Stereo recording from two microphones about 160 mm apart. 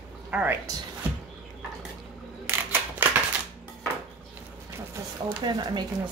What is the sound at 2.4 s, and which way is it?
Camera, 10° right (ahead or behind).